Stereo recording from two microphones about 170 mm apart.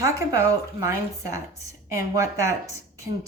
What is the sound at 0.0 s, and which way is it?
A woman's voice, 20° right (ahead or behind).